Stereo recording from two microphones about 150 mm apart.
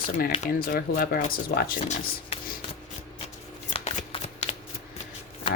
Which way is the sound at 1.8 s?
50° left (ahead or behind).